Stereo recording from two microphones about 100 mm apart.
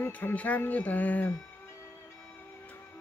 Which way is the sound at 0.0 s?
20° left (ahead or behind).